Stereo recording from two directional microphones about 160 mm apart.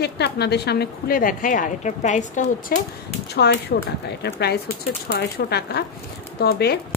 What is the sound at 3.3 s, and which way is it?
Speech, 90° left.